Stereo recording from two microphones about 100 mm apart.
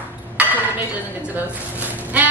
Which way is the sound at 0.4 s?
15° right (ahead or behind).